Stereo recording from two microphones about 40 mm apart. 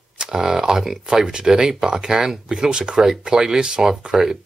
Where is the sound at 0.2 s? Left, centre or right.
Centre.